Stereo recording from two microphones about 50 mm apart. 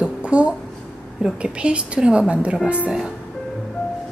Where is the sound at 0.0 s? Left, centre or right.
Right.